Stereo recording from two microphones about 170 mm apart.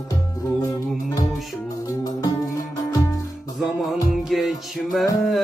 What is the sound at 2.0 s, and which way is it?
Music, 20° left (ahead or behind).